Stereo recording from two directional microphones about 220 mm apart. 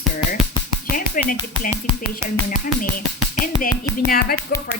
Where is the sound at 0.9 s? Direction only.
40° left (ahead or behind).